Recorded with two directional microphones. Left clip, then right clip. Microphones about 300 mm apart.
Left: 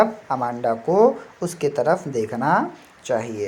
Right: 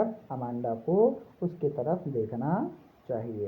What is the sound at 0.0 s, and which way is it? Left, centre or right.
Speech, left.